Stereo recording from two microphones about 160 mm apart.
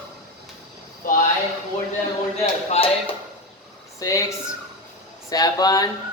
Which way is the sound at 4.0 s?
20° left (ahead or behind).